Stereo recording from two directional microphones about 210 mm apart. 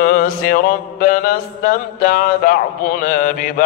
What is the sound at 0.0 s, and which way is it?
Mantra, 45° left (ahead or behind).